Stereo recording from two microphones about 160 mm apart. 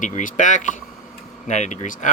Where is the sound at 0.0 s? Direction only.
50° left (ahead or behind).